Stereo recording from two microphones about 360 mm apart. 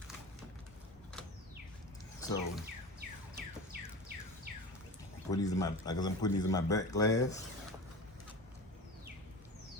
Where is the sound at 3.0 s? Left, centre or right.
Right.